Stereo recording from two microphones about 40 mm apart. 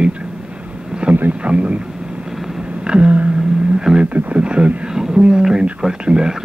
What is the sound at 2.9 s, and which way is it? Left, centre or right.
Speech, right.